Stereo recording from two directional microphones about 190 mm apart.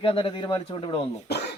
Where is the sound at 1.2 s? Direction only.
60° left (ahead or behind).